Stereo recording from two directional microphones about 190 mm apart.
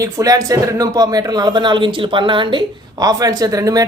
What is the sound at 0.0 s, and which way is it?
Speech, 20° right (ahead or behind).